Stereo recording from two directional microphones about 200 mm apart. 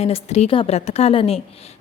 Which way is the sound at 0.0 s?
35° left (ahead or behind).